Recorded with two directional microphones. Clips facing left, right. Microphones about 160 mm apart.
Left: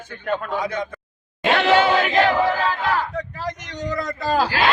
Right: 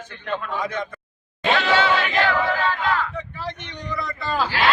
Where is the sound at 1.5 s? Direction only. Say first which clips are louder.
Left 3 dB; 55° left (ahead or behind).